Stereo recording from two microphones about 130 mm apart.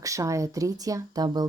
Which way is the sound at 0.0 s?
25° right (ahead or behind).